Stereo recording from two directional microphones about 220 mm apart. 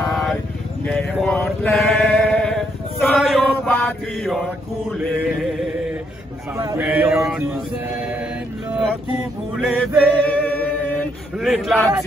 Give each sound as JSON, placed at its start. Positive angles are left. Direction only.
{"t": 0.0, "sound": "vehicle", "side_deg": 0}
{"t": 0.8, "sound": "chant", "side_deg": 5}
{"t": 6.8, "sound": "speech", "side_deg": -5}
{"t": 9.7, "sound": "male singing", "side_deg": 5}